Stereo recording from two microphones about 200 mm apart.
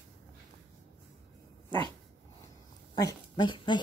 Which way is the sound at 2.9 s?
20° left (ahead or behind).